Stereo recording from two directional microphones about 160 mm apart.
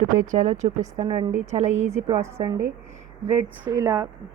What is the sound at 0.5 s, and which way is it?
Speech, 50° right (ahead or behind).